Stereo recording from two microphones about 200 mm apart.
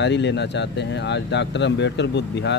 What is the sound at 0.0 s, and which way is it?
Speech, 60° left (ahead or behind).